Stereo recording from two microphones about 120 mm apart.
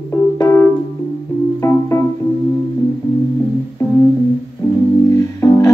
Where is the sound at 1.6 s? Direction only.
25° left (ahead or behind).